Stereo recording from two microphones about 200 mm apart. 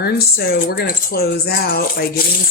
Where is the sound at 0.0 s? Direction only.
50° left (ahead or behind).